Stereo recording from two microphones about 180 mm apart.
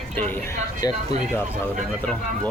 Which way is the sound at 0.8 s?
20° left (ahead or behind).